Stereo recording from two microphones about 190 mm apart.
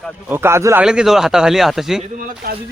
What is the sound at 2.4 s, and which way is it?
Speech, 50° right (ahead or behind).